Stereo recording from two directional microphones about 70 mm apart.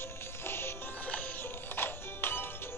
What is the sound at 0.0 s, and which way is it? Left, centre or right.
Music, left.